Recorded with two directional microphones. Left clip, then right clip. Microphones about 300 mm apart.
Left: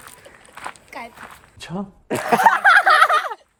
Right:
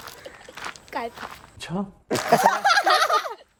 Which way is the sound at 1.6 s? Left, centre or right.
Centre.